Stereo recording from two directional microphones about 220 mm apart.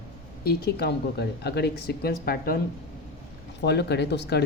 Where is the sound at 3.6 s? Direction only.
50° left (ahead or behind).